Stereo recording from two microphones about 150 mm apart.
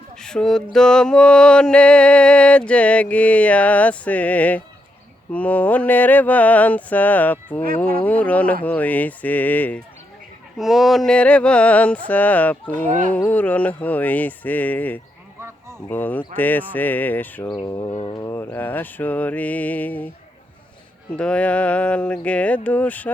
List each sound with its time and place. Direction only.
0.2 s mantra: 5° left (ahead or behind)
10.6 s mantra: centre (ahead or behind)
12.7 s speech: 60° right (ahead or behind)
13.1 s mantra: 10° left (ahead or behind)
17.5 s speech: 30° left (ahead or behind)
17.9 s mantra: 30° left (ahead or behind); by 20.1 s 10° left (ahead or behind)
21.2 s mantra: 5° left (ahead or behind)